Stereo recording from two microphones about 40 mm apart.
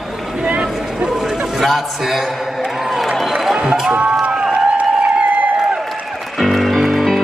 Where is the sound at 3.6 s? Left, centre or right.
Centre.